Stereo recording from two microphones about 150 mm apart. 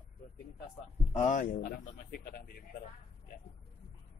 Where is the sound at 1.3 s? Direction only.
65° left (ahead or behind).